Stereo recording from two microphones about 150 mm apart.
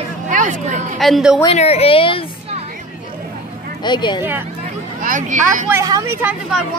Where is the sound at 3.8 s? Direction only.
30° left (ahead or behind).